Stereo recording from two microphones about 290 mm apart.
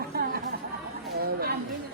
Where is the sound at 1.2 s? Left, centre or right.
Right.